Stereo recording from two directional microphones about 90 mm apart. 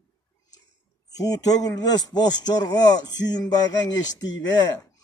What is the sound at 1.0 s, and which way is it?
A man's voice, 40° left (ahead or behind).